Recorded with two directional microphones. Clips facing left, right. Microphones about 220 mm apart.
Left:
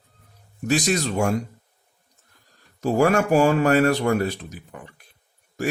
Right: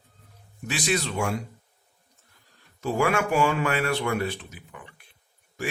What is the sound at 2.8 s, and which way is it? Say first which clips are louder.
Speech: left 5 dB; 40° left (ahead or behind).